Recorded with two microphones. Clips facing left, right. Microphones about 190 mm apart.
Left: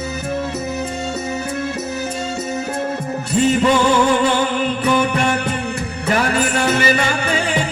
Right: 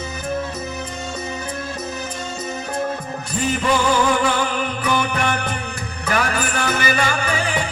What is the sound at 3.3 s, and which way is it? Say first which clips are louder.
Music: left 6 dB; 25° left (ahead or behind).